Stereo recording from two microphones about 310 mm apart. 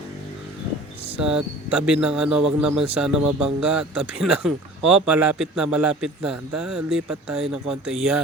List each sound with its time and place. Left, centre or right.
1.1 s speech: centre